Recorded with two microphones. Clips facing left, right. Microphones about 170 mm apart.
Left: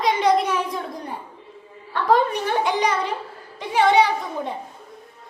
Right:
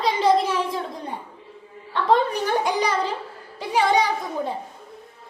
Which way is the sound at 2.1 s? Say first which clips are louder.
Left 1 dB; 35° right (ahead or behind).